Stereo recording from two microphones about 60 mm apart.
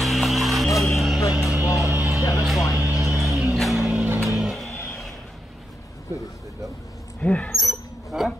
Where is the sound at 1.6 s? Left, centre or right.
Left.